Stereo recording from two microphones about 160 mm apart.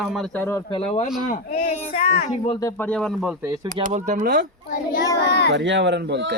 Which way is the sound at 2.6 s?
20° left (ahead or behind).